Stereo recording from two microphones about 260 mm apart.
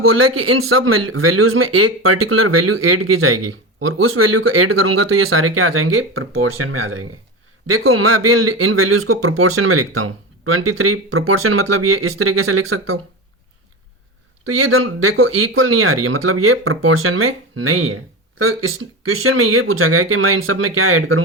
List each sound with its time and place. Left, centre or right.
0.2 s speech: right
14.5 s speech: right